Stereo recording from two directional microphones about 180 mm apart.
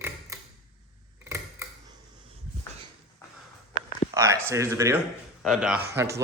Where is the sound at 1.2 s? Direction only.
15° right (ahead or behind).